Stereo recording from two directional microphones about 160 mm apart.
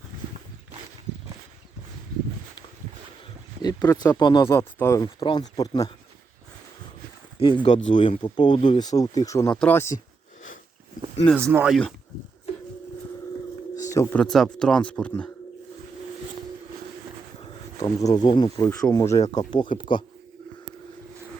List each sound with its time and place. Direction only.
3.6 s speech: 25° left (ahead or behind)
4.4 s speech: 15° left (ahead or behind)
7.3 s speech: 30° left (ahead or behind)
7.7 s speech: 50° left (ahead or behind)
8.0 s speech: 30° left (ahead or behind)
9.5 s speech: 10° left (ahead or behind)
11.3 s speech: 15° right (ahead or behind)
11.7 s speech: centre (ahead or behind)
13.9 s speech: 20° left (ahead or behind)
14.2 s speech: centre (ahead or behind)
17.8 s speech: 25° left (ahead or behind)